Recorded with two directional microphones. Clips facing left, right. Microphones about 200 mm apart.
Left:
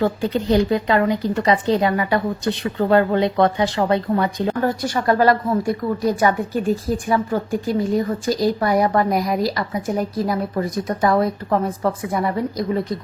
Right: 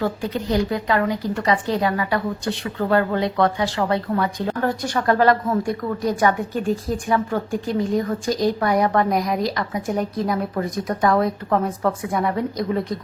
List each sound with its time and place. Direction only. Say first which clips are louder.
0.0 s a woman's voice: left 4 dB; 25° left (ahead or behind)
4.6 s a woman's voice: even; 5° left (ahead or behind)